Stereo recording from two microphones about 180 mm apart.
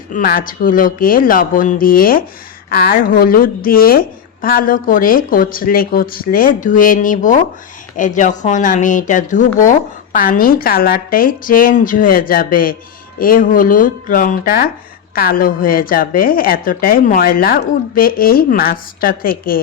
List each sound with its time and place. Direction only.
0.1 s speech: 50° left (ahead or behind)